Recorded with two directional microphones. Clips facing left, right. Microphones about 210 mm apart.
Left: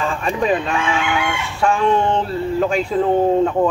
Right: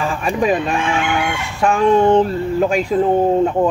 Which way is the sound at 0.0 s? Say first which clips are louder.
Right 2 dB; 10° right (ahead or behind).